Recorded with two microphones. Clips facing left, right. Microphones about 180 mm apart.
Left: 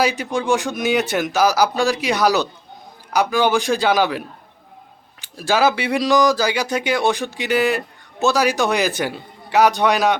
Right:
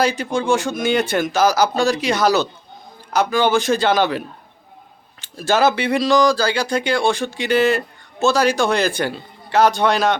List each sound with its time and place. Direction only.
0.0 s a man's voice: 5° left (ahead or behind)
0.4 s speech: 15° left (ahead or behind)
0.9 s a man's voice: 5° left (ahead or behind)
5.4 s speech: 5° left (ahead or behind)